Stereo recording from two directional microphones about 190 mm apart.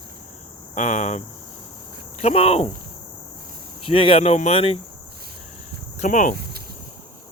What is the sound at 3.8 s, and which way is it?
Speech, 30° left (ahead or behind).